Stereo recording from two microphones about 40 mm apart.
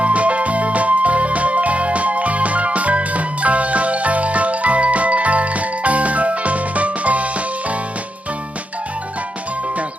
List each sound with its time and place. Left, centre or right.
0.0 s music: right